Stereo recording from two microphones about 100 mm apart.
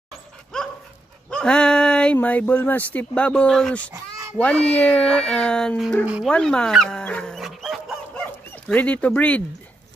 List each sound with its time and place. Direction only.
1.3 s a sound: 10° left (ahead or behind)
2.1 s speech: 15° left (ahead or behind)
3.9 s a sound: 30° right (ahead or behind)
4.4 s speech: 15° left (ahead or behind)
7.3 s dog: centre (ahead or behind)
8.6 s speech: 15° left (ahead or behind)